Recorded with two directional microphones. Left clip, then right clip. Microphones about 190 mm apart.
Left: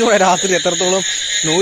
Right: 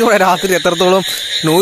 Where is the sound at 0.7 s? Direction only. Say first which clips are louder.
Right 4 dB; 45° right (ahead or behind).